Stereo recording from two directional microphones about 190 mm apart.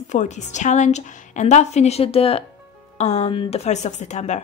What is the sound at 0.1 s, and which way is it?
Speech, 40° left (ahead or behind).